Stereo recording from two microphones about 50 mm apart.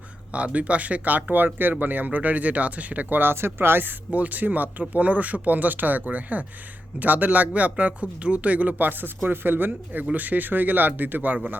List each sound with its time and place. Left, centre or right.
0.3 s speech: right
4.1 s speech: right